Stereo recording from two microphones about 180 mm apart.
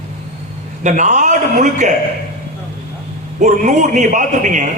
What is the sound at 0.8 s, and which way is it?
A man's voice, 40° right (ahead or behind).